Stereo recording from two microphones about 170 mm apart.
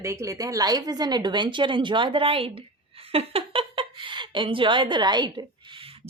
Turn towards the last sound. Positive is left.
turn(degrees=-35)  # may be behind; listen again after turning